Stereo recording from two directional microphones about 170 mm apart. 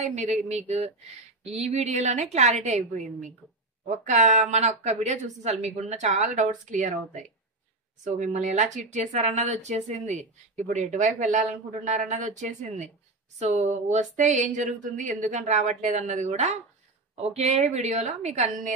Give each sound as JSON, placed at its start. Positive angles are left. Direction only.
{"t": 0.0, "sound": "a woman's voice", "side_deg": -45}